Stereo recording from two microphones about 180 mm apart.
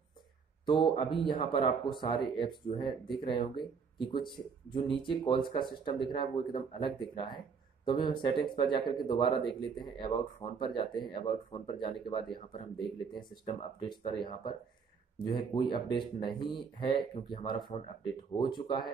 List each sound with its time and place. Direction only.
0.7 s speech: 25° left (ahead or behind)